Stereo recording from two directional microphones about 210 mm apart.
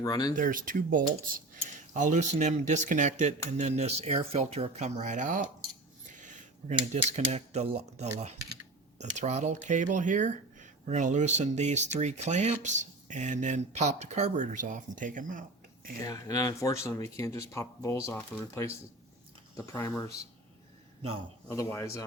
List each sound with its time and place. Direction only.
0.0 s speech: 20° left (ahead or behind)
0.3 s speech: 40° right (ahead or behind)
6.1 s a sound: 35° right (ahead or behind)
6.7 s speech: 30° right (ahead or behind)
9.1 s speech: 35° right (ahead or behind)
16.0 s speech: 15° left (ahead or behind)
21.4 s speech: 15° left (ahead or behind)